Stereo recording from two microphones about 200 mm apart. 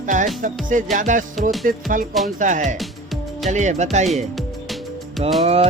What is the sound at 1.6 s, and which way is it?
Music, 45° right (ahead or behind).